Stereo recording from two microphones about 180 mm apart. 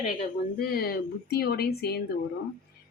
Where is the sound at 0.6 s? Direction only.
55° left (ahead or behind).